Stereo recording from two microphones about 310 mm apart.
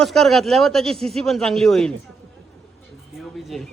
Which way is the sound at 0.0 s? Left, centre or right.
Centre.